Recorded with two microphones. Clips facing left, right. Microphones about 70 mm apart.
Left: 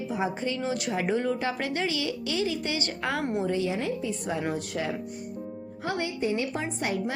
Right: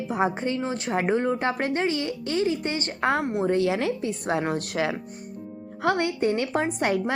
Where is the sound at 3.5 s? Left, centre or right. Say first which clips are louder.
Right 5 dB; right.